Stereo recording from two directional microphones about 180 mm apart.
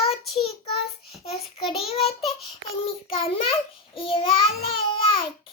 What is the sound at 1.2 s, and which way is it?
Child singing, 35° left (ahead or behind).